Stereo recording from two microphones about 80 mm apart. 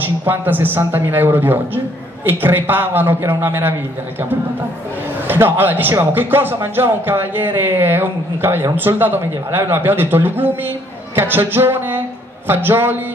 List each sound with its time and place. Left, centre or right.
0.0 s speech: right
5.3 s speech: right